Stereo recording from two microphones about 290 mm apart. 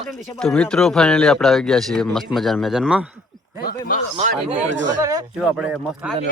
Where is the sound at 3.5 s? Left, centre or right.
Left.